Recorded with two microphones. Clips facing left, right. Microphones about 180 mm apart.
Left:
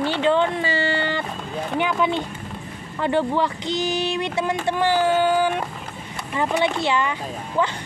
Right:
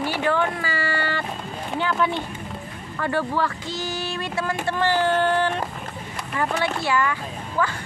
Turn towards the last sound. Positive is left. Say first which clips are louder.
# left 2 dB
turn(degrees=20)  # may be behind; listen again after turning